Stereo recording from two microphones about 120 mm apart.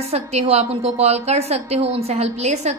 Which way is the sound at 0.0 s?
60° right (ahead or behind).